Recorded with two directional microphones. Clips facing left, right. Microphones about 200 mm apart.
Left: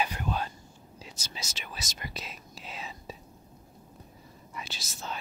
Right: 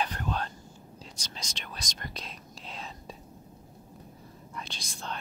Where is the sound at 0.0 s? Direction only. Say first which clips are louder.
Left 1 dB; 10° left (ahead or behind).